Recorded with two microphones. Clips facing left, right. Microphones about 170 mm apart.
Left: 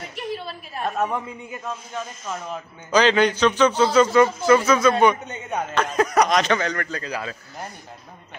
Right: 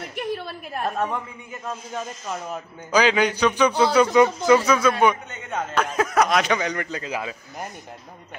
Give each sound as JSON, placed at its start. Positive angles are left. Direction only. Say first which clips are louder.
{"t": 0.1, "sound": "a sound", "louder": "right 2 dB", "side_deg": -50}
{"t": 0.8, "sound": "a man's voice", "louder": "left 1 dB", "side_deg": 5}
{"t": 2.2, "sound": "a man's voice", "louder": "even", "side_deg": -10}
{"t": 5.1, "sound": "a man's voice", "louder": "left 2 dB", "side_deg": 15}
{"t": 5.8, "sound": "a man's voice", "louder": "left 1 dB", "side_deg": -5}